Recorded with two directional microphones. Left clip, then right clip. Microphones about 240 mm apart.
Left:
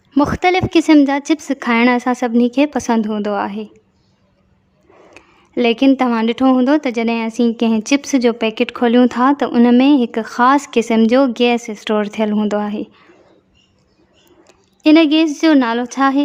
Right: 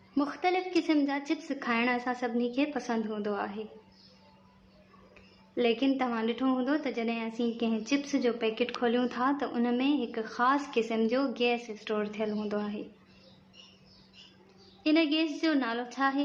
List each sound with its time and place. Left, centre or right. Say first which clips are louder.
0.1 s speech: left 15 dB; left
5.1 s speech: left 12 dB; left
14.8 s speech: left 16 dB; left